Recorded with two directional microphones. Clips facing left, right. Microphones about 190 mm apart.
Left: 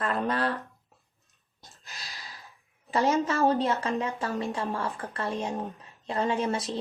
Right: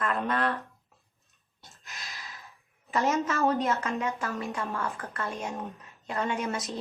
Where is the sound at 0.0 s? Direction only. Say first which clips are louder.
Left 1 dB; 35° left (ahead or behind).